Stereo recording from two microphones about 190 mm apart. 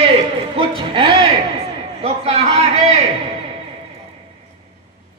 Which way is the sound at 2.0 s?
35° right (ahead or behind).